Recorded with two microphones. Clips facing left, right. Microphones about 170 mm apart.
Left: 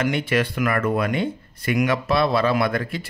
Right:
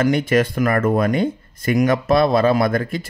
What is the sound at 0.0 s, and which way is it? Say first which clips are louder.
Speech: right 5 dB; 40° right (ahead or behind).